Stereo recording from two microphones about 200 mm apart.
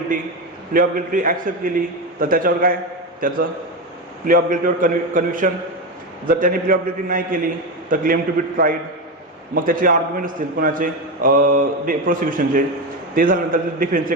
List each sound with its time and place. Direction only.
0.7 s a man's voice: 45° right (ahead or behind)